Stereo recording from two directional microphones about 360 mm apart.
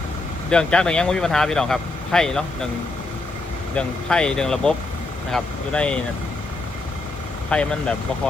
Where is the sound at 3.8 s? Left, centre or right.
Centre.